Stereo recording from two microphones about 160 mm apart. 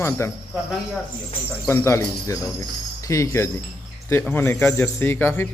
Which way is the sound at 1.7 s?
15° left (ahead or behind).